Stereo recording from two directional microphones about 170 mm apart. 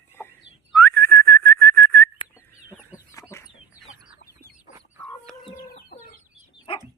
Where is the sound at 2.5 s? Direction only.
15° left (ahead or behind).